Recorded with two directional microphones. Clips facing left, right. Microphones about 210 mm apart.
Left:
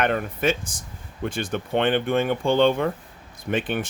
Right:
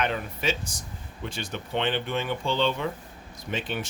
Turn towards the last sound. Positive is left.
turn(degrees=55)  # may be behind; listen again after turning